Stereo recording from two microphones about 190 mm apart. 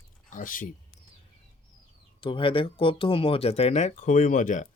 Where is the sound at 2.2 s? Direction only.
25° left (ahead or behind).